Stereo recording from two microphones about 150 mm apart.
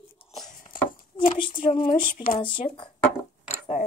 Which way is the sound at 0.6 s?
65° left (ahead or behind).